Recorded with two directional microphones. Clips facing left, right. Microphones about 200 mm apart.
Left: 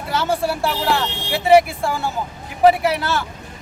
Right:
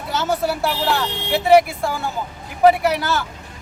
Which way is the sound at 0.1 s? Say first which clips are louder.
Even; centre (ahead or behind).